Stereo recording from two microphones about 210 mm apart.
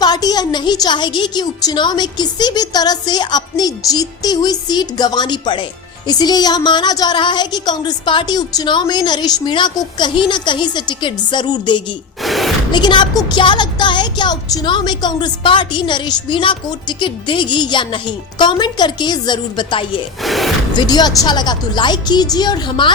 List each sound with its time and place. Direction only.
0.0 s speech: 20° left (ahead or behind)
12.2 s a sound: centre (ahead or behind)
12.7 s speech: 20° left (ahead or behind)
20.2 s speech: centre (ahead or behind)
20.7 s speech: 20° left (ahead or behind)